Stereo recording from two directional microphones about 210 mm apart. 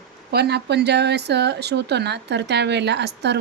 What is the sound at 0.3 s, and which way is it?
Speech, 50° right (ahead or behind).